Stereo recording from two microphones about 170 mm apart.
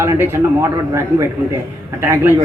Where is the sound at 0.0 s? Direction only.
15° right (ahead or behind).